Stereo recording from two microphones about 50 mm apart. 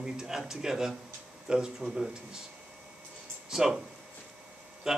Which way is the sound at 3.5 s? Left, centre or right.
Centre.